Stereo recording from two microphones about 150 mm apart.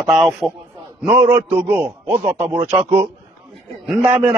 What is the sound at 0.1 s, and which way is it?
Speech, centre (ahead or behind).